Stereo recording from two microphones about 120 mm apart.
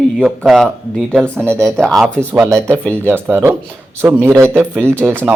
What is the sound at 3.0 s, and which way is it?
Speech, 20° right (ahead or behind).